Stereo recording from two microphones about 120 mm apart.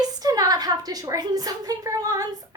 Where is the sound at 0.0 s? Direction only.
30° right (ahead or behind).